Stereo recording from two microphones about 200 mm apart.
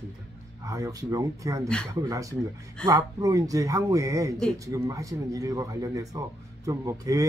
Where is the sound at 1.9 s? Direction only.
15° right (ahead or behind).